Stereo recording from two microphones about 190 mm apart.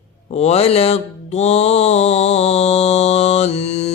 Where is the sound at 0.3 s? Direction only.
35° left (ahead or behind).